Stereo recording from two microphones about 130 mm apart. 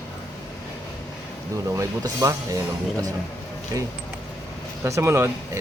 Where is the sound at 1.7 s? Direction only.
25° right (ahead or behind).